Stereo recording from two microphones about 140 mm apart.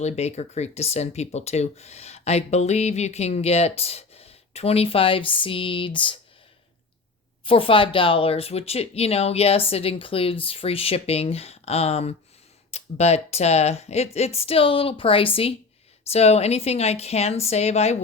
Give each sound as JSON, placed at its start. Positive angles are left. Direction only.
{"t": 0.0, "sound": "speech", "side_deg": 50}
{"t": 7.4, "sound": "speech", "side_deg": 40}